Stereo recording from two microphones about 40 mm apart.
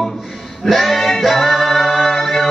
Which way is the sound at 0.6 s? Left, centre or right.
Centre.